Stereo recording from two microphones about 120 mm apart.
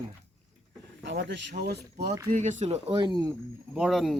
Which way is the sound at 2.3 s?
90° right.